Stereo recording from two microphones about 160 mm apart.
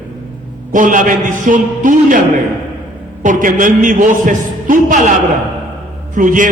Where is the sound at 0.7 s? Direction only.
55° right (ahead or behind).